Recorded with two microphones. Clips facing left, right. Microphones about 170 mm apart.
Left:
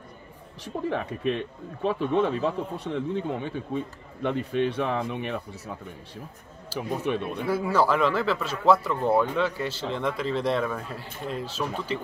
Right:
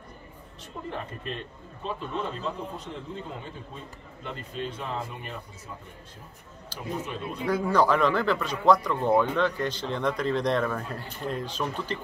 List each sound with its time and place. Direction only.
0.8 s a man's voice: 85° left
6.7 s speech: 5° left (ahead or behind)